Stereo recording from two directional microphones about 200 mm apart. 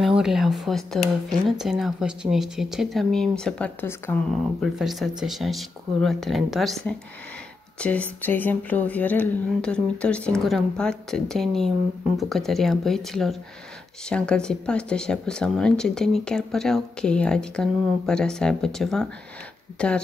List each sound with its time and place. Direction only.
0.0 s speech: centre (ahead or behind)
4.7 s speech: centre (ahead or behind)